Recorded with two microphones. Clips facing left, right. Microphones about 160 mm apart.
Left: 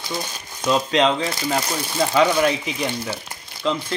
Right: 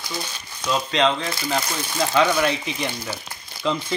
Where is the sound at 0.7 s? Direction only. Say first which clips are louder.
Left 3 dB; 10° left (ahead or behind).